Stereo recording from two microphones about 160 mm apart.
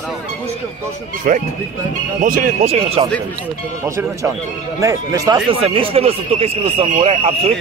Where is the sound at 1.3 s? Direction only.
60° right (ahead or behind); by 3.1 s 40° right (ahead or behind).